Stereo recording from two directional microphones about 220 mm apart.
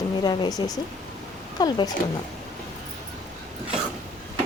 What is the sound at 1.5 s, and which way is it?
Speech, 20° left (ahead or behind).